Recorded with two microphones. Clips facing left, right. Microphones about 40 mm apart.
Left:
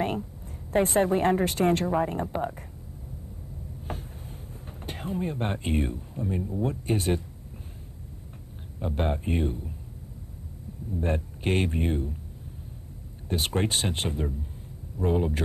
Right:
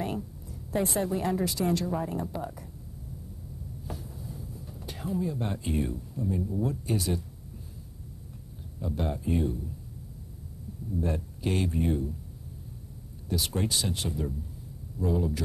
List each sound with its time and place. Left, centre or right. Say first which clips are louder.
0.0 s a woman's voice: left 4 dB; left
3.8 s a sound: left 3 dB; left
6.6 s speech: left 2 dB; left
8.7 s speech: left 4 dB; left
11.0 s speech: left 3 dB; left
13.3 s speech: left 3 dB; left